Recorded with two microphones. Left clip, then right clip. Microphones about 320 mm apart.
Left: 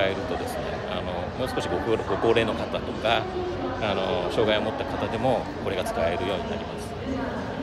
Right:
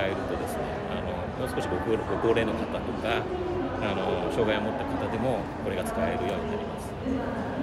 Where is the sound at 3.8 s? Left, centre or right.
Centre.